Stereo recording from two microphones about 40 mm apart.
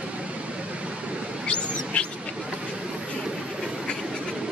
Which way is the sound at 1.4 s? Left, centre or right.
Left.